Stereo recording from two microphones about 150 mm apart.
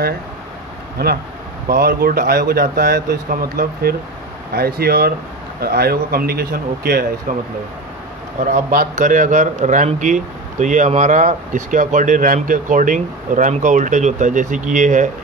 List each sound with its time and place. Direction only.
1.0 s speech: 90° right
4.6 s speech: 90° right
7.3 s a man's voice: 65° right (ahead or behind)
8.6 s a man's voice: 65° right (ahead or behind)